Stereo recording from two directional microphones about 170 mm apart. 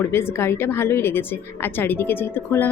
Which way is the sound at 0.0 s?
15° left (ahead or behind).